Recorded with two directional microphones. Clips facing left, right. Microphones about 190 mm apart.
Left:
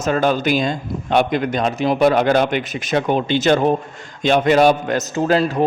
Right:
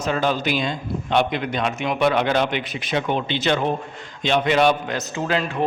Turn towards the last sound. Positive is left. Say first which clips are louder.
# left 6 dB
turn(degrees=35)  # may be behind; listen again after turning